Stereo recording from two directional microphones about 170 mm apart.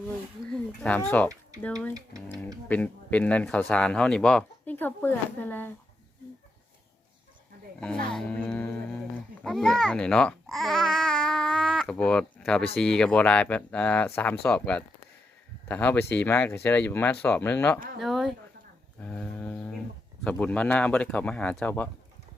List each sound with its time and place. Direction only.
0.5 s speech: 5° left (ahead or behind)
1.9 s speech: 20° right (ahead or behind)
2.6 s speech: 10° left (ahead or behind)
8.0 s speech: 5° left (ahead or behind)
17.7 s speech: 65° right (ahead or behind)
18.0 s speech: centre (ahead or behind)